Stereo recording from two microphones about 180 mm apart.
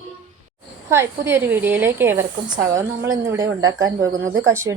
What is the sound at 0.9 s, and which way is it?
A woman's voice, 15° right (ahead or behind).